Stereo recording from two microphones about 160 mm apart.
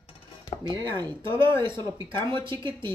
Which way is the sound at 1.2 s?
30° right (ahead or behind).